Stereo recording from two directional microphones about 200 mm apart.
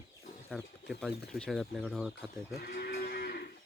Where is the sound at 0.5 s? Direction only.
Centre (ahead or behind).